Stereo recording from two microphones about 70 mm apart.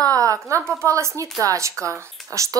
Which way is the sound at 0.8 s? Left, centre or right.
Right.